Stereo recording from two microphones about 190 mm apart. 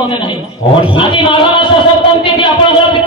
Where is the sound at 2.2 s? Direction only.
25° left (ahead or behind).